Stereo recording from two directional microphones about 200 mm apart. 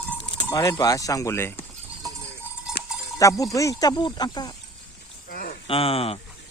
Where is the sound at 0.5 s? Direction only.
15° left (ahead or behind).